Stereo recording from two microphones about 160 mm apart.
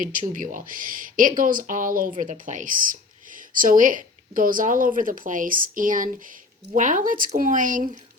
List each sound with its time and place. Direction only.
0.0 s speech: 55° right (ahead or behind)